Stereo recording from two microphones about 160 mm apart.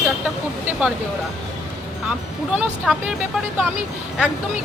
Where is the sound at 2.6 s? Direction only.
5° right (ahead or behind).